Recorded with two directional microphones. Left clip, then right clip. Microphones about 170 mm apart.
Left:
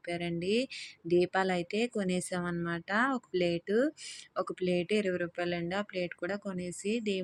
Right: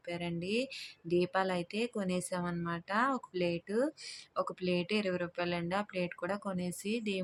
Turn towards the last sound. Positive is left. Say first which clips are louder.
# left 3 dB
turn(degrees=10)  # may be behind; listen again after turning